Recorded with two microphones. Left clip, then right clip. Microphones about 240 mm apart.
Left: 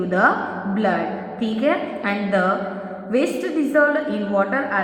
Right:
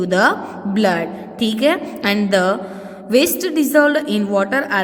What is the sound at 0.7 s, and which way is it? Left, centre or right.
A woman's voice, right.